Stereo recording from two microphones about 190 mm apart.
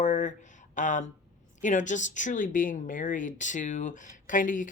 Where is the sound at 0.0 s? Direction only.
40° left (ahead or behind).